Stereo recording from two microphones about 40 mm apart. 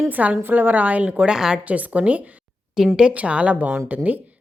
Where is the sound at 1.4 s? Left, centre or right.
Centre.